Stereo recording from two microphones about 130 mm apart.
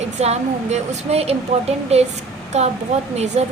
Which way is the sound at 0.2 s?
55° right (ahead or behind).